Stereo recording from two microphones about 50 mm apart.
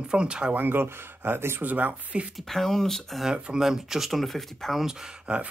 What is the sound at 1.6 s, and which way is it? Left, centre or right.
Speech, right.